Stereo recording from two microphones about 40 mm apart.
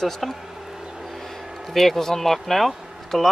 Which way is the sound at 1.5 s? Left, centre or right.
Centre.